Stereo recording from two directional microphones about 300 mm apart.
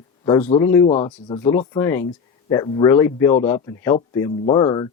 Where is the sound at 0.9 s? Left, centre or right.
Left.